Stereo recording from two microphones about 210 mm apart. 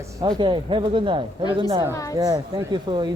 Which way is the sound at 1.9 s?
15° left (ahead or behind).